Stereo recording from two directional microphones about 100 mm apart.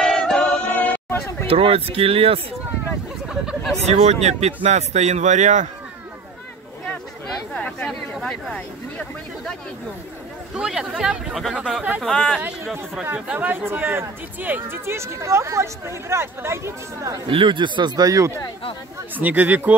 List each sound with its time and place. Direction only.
0.0 s choir: 5° left (ahead or behind)
1.5 s speech: 70° right (ahead or behind)
3.3 s speech: 5° right (ahead or behind)
3.7 s speech: 90° right
7.5 s a sound: 15° left (ahead or behind)
10.5 s speech: 5° right (ahead or behind)
13.0 s speech: 15° right (ahead or behind); by 17.2 s 30° right (ahead or behind)
17.3 s speech: 55° right (ahead or behind); by 18.3 s 35° right (ahead or behind)
19.1 s speech: 15° right (ahead or behind)